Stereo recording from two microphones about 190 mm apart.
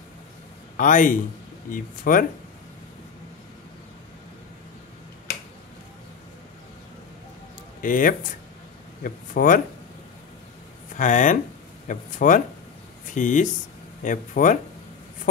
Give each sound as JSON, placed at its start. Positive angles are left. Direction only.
{"t": 0.7, "sound": "speech", "side_deg": 45}
{"t": 7.8, "sound": "speech", "side_deg": 45}
{"t": 11.0, "sound": "speech", "side_deg": 40}